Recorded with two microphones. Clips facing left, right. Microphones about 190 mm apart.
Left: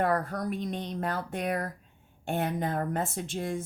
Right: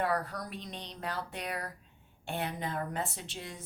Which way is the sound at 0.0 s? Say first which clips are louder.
Left 5 dB; 50° left (ahead or behind).